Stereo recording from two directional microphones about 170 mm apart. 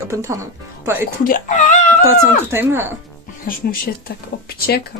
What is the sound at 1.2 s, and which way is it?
Speech, 50° left (ahead or behind).